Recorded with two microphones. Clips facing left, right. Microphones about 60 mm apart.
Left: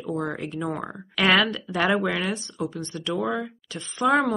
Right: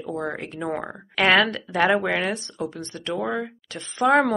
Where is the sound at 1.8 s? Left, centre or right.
Right.